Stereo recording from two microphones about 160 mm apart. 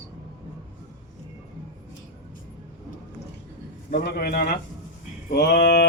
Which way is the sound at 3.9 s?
75° left (ahead or behind).